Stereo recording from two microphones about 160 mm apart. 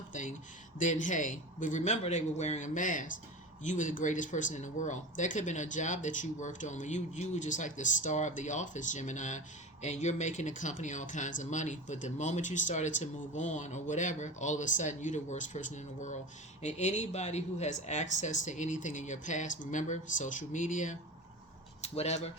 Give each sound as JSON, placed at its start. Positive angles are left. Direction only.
{"t": 0.1, "sound": "speech", "side_deg": 50}